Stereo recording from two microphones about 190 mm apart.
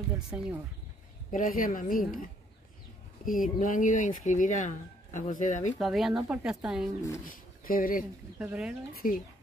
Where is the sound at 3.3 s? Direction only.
45° left (ahead or behind).